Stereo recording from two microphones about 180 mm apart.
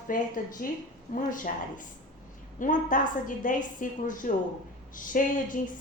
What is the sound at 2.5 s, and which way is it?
A woman's voice, 45° left (ahead or behind).